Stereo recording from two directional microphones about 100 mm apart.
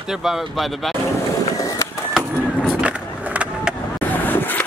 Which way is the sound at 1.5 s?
35° left (ahead or behind).